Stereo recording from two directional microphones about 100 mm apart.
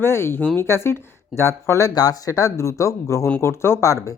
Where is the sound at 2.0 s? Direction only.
40° left (ahead or behind).